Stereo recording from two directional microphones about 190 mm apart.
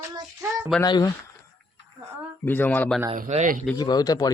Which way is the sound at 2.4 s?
10° left (ahead or behind).